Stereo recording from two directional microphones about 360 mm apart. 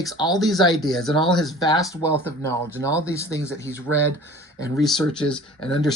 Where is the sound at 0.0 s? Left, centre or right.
Centre.